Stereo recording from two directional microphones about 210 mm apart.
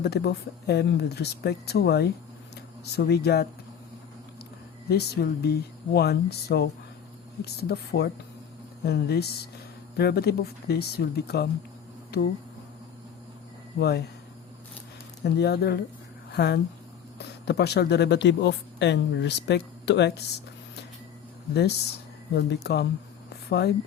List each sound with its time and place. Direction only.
0.0 s speech: 50° left (ahead or behind)
4.9 s speech: 50° left (ahead or behind)
13.7 s speech: 50° left (ahead or behind)
15.2 s speech: 50° left (ahead or behind)
22.4 s speech: 50° left (ahead or behind)